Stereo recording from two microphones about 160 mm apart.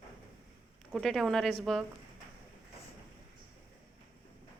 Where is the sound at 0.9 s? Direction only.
Centre (ahead or behind).